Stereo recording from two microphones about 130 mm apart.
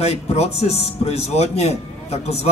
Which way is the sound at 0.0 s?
55° left (ahead or behind).